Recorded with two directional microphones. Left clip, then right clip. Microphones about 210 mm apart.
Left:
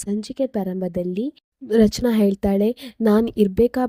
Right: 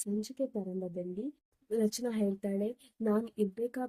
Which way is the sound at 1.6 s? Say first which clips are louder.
Left 15 dB; 40° left (ahead or behind).